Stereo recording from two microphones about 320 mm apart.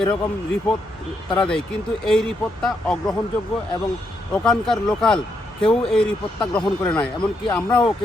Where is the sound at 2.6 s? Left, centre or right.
Centre.